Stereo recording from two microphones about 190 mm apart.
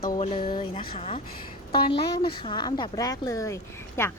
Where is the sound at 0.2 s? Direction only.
30° left (ahead or behind).